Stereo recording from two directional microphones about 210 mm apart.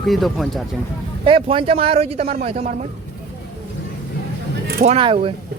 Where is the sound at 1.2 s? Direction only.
25° right (ahead or behind).